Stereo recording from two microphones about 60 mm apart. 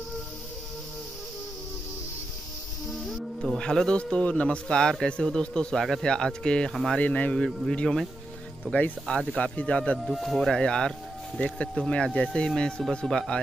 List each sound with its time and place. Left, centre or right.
2.9 s speech: centre
6.7 s speech: centre
7.0 s speech: left
7.3 s speech: centre
8.7 s speech: left
10.0 s speech: centre
10.5 s speech: centre
13.0 s speech: centre